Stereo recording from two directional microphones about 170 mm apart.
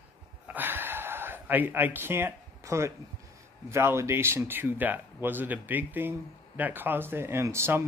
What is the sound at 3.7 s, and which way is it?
Speech, 15° right (ahead or behind).